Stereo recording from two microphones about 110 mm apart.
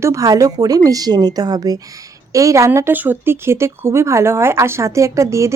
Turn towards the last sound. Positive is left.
turn(degrees=-25)  # may be behind; listen again after turning